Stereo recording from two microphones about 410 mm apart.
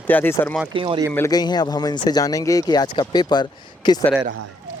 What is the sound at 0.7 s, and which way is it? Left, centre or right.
Speech, centre.